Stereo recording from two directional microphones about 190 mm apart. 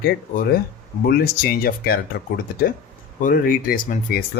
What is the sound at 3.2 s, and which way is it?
Speech, 50° left (ahead or behind).